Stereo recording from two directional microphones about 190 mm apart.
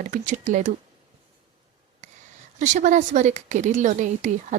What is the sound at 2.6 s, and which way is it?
A woman's voice, 40° right (ahead or behind).